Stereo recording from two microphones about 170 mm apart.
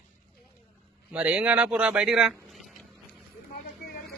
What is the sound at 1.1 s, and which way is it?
Speech, 10° right (ahead or behind).